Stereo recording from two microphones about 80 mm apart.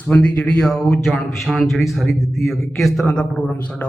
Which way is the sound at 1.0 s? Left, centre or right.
Centre.